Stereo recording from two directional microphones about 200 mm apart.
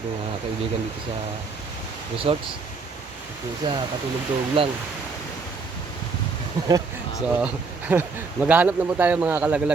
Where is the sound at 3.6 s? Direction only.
25° right (ahead or behind).